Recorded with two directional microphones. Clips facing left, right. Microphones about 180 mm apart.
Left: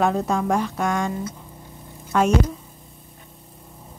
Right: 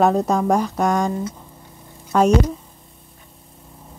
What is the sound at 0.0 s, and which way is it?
Speech, 40° right (ahead or behind).